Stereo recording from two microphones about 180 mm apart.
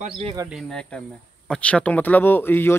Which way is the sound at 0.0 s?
35° right (ahead or behind).